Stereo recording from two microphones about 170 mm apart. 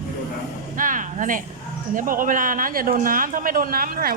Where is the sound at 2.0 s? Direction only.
50° right (ahead or behind).